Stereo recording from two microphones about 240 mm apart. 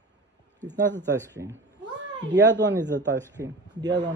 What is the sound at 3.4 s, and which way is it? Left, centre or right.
Speech, centre.